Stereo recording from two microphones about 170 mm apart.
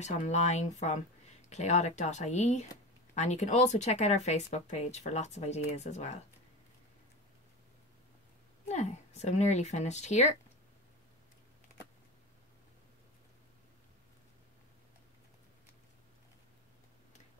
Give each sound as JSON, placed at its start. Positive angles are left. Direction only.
{"t": 0.0, "sound": "speech", "side_deg": 40}
{"t": 8.6, "sound": "speech", "side_deg": 40}